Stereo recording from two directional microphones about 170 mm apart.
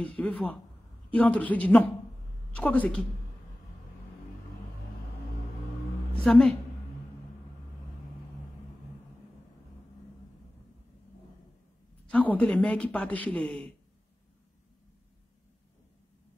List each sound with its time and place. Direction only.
0.0 s speech: 5° left (ahead or behind)
6.2 s a woman's voice: 5° left (ahead or behind)
12.1 s speech: 10° left (ahead or behind)